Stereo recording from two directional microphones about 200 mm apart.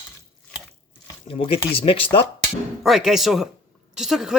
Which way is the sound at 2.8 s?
Centre (ahead or behind).